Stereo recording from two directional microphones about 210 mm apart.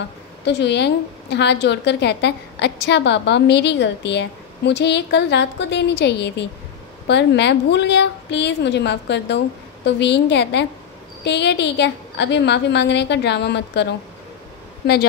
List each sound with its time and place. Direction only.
0.5 s a woman's voice: 55° left (ahead or behind)